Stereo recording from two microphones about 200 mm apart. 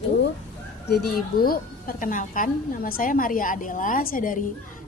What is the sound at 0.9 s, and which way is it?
A woman's voice, 55° left (ahead or behind).